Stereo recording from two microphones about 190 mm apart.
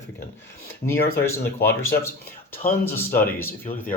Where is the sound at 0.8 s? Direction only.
55° left (ahead or behind).